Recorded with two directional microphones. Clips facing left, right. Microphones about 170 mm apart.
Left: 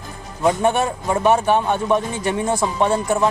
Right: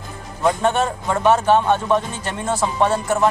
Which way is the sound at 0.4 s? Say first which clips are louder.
Left 1 dB; 10° left (ahead or behind).